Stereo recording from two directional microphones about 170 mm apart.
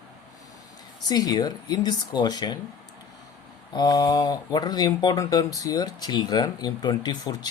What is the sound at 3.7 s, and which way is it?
Speech, 25° left (ahead or behind).